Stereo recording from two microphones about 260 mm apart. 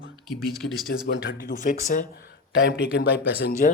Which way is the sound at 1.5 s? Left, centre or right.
Left.